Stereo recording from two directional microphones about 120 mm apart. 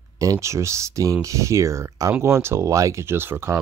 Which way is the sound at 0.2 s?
25° right (ahead or behind).